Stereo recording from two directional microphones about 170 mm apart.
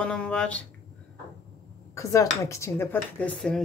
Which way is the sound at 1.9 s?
20° left (ahead or behind).